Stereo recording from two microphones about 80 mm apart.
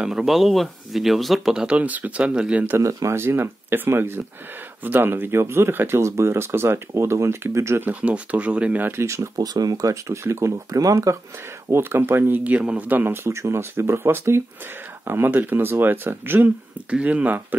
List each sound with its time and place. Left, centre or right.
0.0 s speech: centre
2.8 s speech: right
7.9 s speech: centre
8.9 s speech: right
9.5 s speech: right
11.7 s speech: right